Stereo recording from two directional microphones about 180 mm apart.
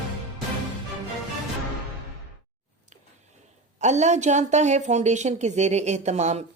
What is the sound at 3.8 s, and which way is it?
A woman's voice, 40° right (ahead or behind).